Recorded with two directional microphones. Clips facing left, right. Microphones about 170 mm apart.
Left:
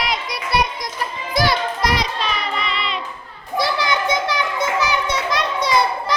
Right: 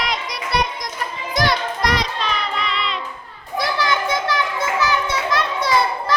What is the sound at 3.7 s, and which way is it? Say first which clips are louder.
Children playing: left 1 dB; 20° left (ahead or behind).